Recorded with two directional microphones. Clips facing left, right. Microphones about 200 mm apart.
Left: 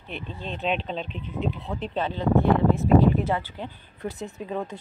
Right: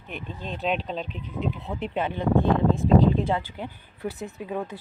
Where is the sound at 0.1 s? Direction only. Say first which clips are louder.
Even; 10° right (ahead or behind).